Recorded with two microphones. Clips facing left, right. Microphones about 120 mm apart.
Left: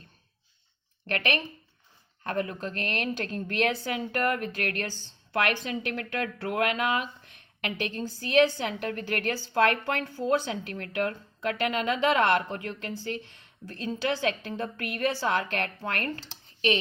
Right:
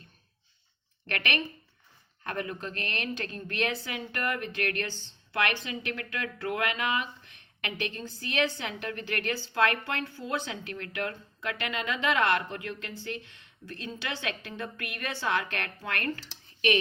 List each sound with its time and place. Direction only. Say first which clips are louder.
1.0 s speech: left 3 dB; 35° left (ahead or behind)